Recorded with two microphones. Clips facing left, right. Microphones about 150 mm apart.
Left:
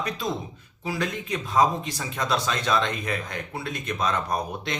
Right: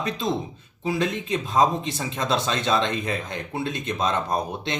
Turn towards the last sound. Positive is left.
turn(degrees=-25)  # may be behind; listen again after turning